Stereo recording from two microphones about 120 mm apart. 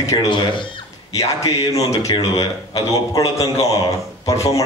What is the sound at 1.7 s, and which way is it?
Speech, 25° left (ahead or behind).